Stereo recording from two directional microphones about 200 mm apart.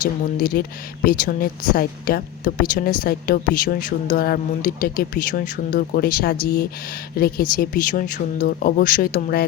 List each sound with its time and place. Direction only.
0.3 s speech: 45° left (ahead or behind)